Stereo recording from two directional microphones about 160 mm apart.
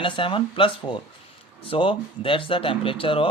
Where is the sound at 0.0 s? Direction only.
30° left (ahead or behind).